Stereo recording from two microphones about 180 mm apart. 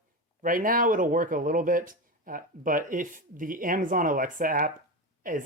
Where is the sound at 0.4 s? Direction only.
50° right (ahead or behind).